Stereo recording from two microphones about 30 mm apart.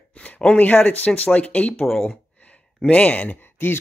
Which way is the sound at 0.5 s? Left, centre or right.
Left.